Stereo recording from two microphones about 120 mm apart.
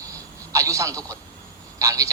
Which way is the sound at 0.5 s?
25° right (ahead or behind).